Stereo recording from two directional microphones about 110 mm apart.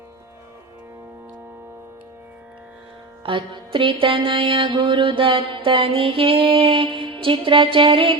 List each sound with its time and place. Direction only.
3.2 s music: 50° right (ahead or behind)